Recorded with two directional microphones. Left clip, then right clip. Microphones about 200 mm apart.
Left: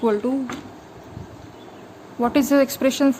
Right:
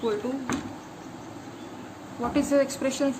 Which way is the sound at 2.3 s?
45° left (ahead or behind).